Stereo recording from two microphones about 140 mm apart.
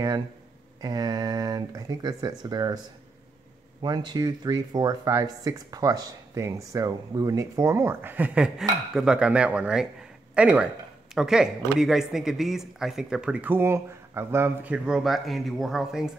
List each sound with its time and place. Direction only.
0.7 s speech: 25° right (ahead or behind)
3.8 s speech: 30° right (ahead or behind); by 16.1 s centre (ahead or behind)